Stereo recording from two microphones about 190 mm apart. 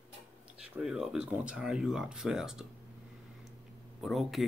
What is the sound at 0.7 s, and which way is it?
Speech, 5° right (ahead or behind).